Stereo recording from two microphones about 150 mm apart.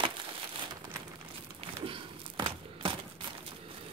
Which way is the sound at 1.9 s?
35° right (ahead or behind).